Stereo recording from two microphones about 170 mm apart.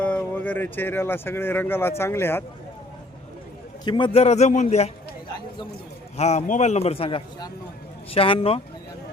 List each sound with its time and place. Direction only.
0.0 s speech: 10° left (ahead or behind)
3.8 s a man's voice: 30° left (ahead or behind)
6.1 s a man's voice: 40° left (ahead or behind)